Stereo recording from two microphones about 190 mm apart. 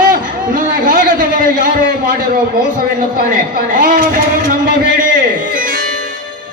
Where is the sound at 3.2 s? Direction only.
45° right (ahead or behind).